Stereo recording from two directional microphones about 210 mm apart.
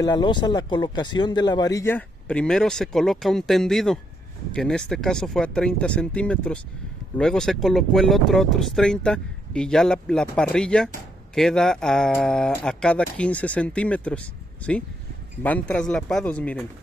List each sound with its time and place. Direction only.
0.0 s speech: 20° left (ahead or behind)